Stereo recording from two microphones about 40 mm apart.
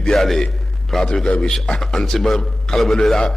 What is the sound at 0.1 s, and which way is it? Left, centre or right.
Speech, centre.